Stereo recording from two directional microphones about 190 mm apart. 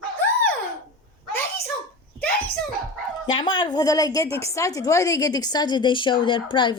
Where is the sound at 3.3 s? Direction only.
25° left (ahead or behind).